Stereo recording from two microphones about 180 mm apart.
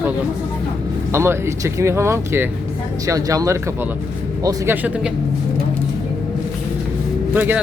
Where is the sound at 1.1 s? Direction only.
15° right (ahead or behind).